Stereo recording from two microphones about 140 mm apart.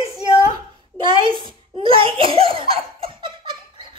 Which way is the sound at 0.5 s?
35° right (ahead or behind).